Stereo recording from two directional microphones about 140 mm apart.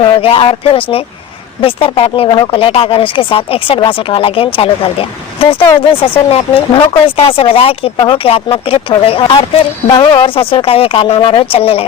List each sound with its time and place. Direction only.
0.0 s speech: 40° left (ahead or behind)